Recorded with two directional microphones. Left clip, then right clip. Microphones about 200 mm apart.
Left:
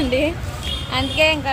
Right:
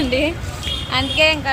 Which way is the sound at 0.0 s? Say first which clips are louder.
Right 1 dB; centre (ahead or behind).